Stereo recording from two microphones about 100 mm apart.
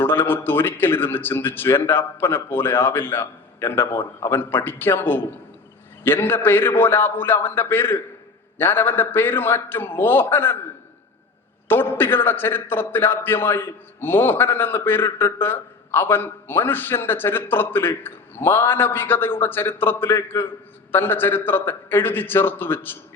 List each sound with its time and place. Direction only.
0.0 s a man's voice: 20° left (ahead or behind)
11.7 s a man's voice: 20° left (ahead or behind)